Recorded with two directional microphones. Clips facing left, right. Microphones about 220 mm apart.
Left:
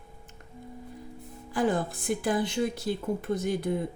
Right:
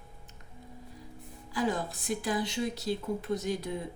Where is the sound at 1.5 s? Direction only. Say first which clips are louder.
Left 4 dB; 50° left (ahead or behind).